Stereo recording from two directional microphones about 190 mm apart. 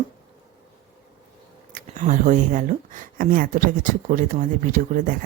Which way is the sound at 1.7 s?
40° right (ahead or behind).